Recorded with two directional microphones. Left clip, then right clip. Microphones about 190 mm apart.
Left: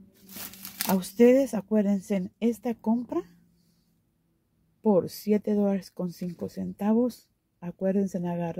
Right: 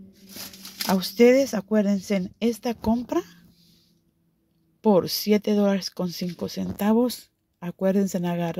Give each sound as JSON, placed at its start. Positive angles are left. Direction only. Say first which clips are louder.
{"t": 0.8, "sound": "speech", "louder": "right 3 dB", "side_deg": 0}
{"t": 4.8, "sound": "speech", "louder": "right 4 dB", "side_deg": -5}